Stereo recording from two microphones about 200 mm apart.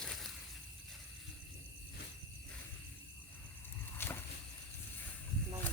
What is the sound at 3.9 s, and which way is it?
Walk, 10° left (ahead or behind).